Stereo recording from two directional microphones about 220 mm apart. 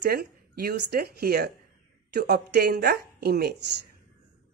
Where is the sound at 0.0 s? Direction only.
45° right (ahead or behind).